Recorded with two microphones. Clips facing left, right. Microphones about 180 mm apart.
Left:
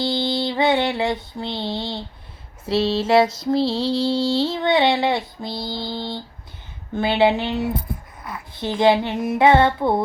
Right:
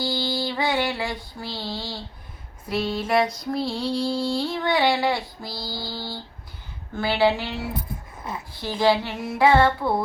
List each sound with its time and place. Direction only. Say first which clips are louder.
0.0 s female singing: left 4 dB; 20° left (ahead or behind)